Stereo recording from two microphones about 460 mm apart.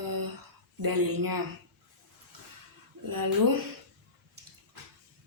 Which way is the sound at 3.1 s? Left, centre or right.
Right.